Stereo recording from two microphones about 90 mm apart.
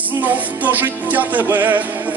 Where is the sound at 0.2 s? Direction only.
20° right (ahead or behind).